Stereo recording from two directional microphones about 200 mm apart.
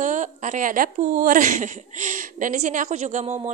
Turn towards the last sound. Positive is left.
turn(degrees=-35)  # may be behind; listen again after turning